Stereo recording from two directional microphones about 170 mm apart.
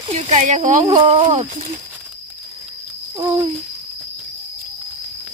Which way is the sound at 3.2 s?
20° right (ahead or behind).